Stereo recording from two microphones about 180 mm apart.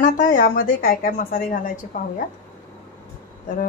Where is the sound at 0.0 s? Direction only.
45° left (ahead or behind).